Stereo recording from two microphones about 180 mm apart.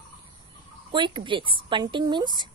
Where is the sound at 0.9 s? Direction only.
25° right (ahead or behind).